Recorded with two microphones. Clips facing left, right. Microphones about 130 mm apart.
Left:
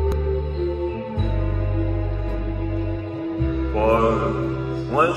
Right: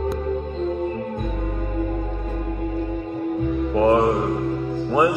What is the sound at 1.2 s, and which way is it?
Music, 70° left (ahead or behind).